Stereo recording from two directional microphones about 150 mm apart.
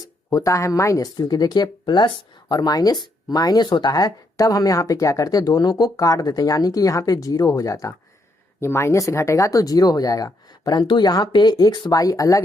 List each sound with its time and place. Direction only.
0.0 s speech: 25° left (ahead or behind)